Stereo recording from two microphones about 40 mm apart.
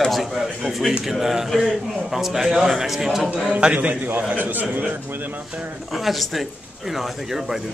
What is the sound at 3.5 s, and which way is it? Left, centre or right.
A man's voice, right.